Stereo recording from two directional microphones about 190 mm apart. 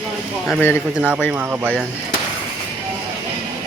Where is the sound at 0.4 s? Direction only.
10° left (ahead or behind).